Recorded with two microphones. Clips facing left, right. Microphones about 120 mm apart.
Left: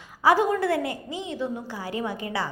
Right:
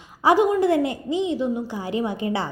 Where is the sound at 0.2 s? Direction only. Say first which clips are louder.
Right 3 dB; 20° right (ahead or behind).